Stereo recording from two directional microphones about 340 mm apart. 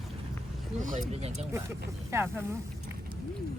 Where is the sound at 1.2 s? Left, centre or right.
Centre.